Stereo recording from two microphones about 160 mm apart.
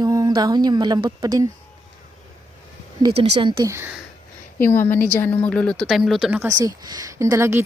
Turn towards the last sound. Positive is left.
turn(degrees=-15)  # may be behind; listen again after turning